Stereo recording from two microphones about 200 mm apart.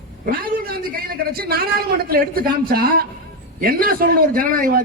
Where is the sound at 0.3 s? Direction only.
50° right (ahead or behind).